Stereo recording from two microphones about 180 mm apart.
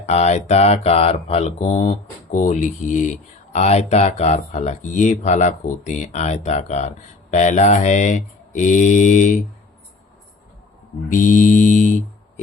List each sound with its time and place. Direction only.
0.0 s speech: 40° left (ahead or behind)
11.1 s mantra: 45° left (ahead or behind)